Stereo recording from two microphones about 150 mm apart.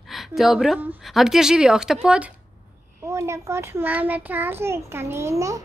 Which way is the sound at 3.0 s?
20° right (ahead or behind).